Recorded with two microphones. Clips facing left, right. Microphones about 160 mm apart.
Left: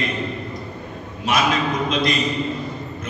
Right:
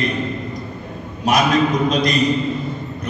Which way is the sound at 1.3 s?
40° right (ahead or behind).